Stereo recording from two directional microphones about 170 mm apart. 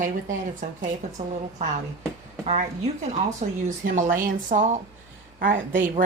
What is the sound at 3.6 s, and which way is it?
Speech, 50° right (ahead or behind).